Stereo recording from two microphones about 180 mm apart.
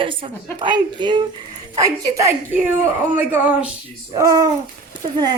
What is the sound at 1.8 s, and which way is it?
A woman's voice, 20° right (ahead or behind).